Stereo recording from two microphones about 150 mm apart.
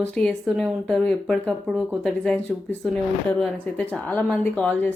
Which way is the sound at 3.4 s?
10° left (ahead or behind).